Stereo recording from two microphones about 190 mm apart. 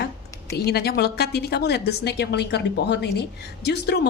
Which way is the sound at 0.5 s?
55° left (ahead or behind).